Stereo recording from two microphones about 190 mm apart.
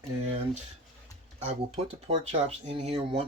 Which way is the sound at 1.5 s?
25° right (ahead or behind).